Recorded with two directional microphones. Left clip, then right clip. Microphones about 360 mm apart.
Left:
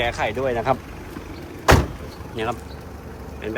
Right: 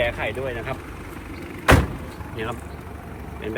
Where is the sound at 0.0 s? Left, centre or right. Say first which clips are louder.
Left 1 dB; centre.